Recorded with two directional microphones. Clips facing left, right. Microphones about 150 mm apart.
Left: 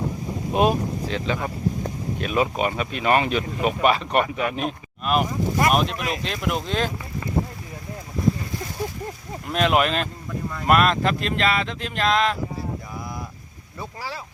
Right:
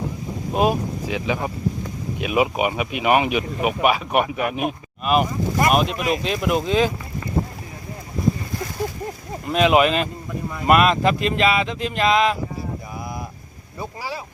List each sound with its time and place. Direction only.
0.5 s speech: 5° right (ahead or behind)
9.5 s speech: 5° right (ahead or behind)
13.7 s speech: 10° right (ahead or behind)